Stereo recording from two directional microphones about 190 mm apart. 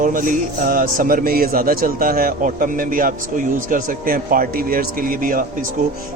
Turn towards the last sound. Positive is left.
turn(degrees=-45)  # may be behind; listen again after turning